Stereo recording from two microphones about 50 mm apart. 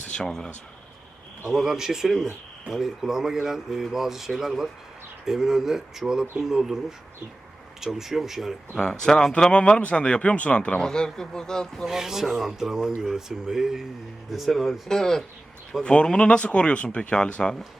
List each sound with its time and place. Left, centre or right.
0.2 s speech: centre
1.5 s speech: centre
7.9 s speech: centre
8.7 s speech: centre
10.8 s speech: centre
11.9 s speech: centre
14.8 s speech: centre